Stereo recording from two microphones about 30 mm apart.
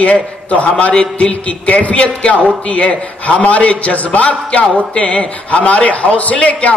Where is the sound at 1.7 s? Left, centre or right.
Left.